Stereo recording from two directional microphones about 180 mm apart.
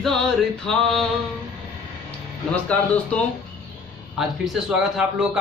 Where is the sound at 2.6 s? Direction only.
5° left (ahead or behind).